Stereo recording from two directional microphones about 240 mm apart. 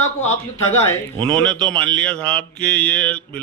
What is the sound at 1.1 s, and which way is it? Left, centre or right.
Speech, centre.